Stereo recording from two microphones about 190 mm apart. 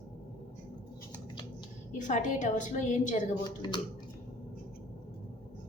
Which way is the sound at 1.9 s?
40° left (ahead or behind).